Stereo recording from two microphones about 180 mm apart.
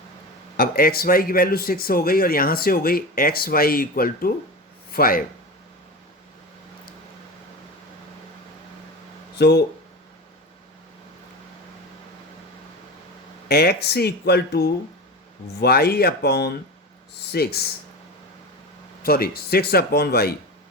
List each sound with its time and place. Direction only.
0.5 s speech: 55° left (ahead or behind)
9.3 s speech: 65° left (ahead or behind)
13.5 s speech: 60° left (ahead or behind)
19.0 s speech: 60° left (ahead or behind)